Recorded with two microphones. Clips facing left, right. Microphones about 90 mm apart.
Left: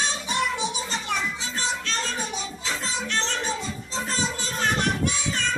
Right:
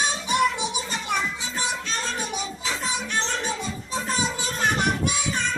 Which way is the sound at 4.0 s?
10° right (ahead or behind).